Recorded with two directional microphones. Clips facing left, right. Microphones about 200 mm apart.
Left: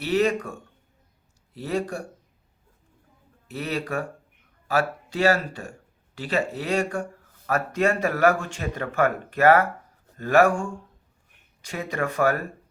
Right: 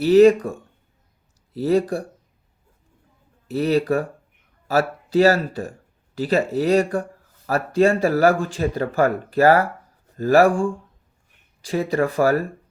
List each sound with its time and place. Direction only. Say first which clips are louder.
0.0 s speech: right 10 dB; 35° right (ahead or behind)
1.5 s speech: right 8 dB; 35° right (ahead or behind)
3.5 s speech: right 9 dB; 35° right (ahead or behind)